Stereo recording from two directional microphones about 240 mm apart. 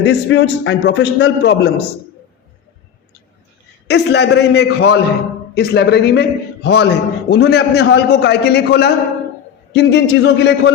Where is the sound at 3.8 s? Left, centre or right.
Left.